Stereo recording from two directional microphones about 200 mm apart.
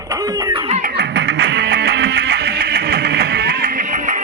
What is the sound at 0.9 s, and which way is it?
Music, 55° right (ahead or behind).